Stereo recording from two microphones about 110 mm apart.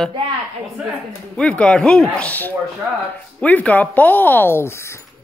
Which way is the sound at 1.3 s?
10° left (ahead or behind).